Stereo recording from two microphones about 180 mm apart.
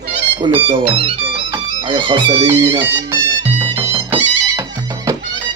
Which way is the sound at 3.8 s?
15° right (ahead or behind).